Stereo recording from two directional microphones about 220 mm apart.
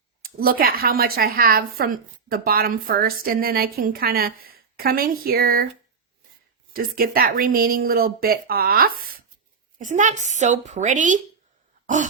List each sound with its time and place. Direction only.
0.2 s a woman's voice: 40° right (ahead or behind)
6.7 s speech: 40° right (ahead or behind)